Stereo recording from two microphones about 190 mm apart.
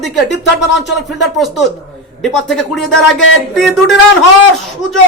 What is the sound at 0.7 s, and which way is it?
A man's voice, centre (ahead or behind).